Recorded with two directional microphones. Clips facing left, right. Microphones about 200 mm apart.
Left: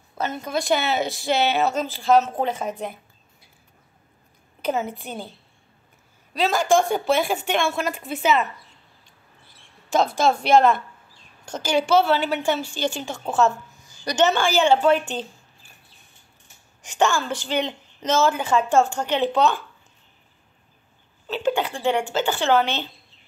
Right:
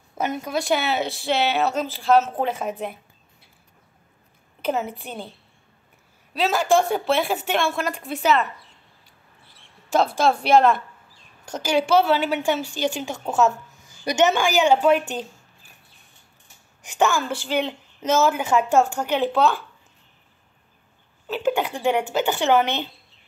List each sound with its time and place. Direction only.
0.1 s a woman's voice: 15° right (ahead or behind)
4.6 s a woman's voice: 5° right (ahead or behind)
6.3 s a woman's voice: 5° right (ahead or behind)
10.2 s a woman's voice: 5° right (ahead or behind)
11.9 s a woman's voice: 5° right (ahead or behind)
16.8 s a woman's voice: 5° right (ahead or behind)
21.3 s a woman's voice: 5° right (ahead or behind)